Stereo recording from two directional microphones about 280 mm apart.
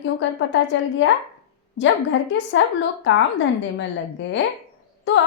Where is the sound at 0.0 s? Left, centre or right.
Left.